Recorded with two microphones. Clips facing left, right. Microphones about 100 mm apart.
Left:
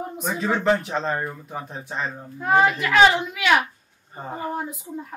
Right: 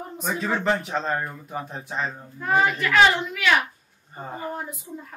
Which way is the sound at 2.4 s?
15° left (ahead or behind).